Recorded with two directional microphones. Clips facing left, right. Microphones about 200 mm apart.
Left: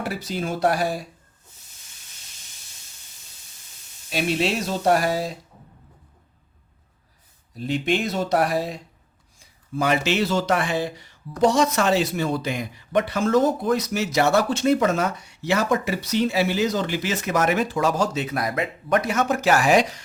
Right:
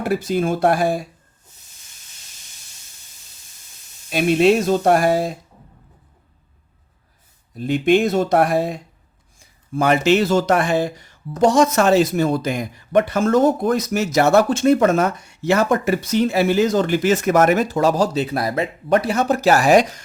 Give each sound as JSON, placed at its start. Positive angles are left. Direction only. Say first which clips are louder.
{"t": 0.0, "sound": "speech", "louder": "right 8 dB", "side_deg": -50}
{"t": 4.1, "sound": "speech", "louder": "right 8 dB", "side_deg": -50}
{"t": 7.5, "sound": "speech", "louder": "right 7 dB", "side_deg": -50}